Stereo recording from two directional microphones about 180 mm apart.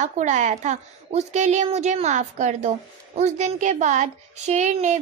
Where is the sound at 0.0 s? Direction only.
45° right (ahead or behind).